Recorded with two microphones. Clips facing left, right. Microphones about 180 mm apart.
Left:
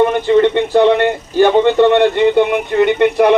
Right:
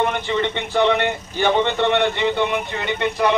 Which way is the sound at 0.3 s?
50° left (ahead or behind).